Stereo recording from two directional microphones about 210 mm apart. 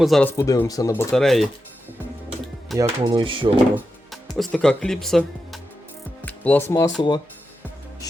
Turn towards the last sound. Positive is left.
turn(degrees=20)  # may be behind; listen again after turning